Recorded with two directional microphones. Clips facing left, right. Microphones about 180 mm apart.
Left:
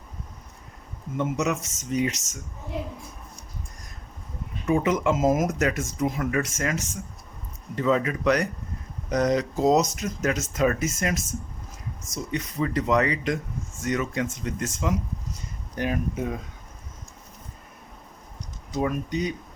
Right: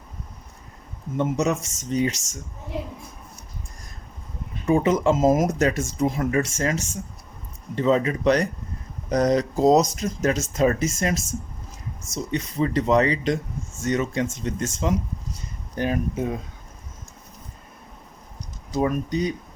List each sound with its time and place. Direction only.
1.1 s speech: 30° right (ahead or behind)
4.6 s speech: 30° right (ahead or behind)
18.7 s speech: 35° right (ahead or behind)